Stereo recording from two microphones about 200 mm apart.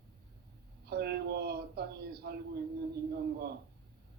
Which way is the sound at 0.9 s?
55° right (ahead or behind).